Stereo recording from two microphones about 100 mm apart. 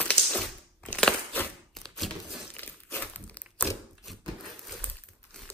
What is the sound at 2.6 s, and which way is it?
Crumpling, 20° left (ahead or behind).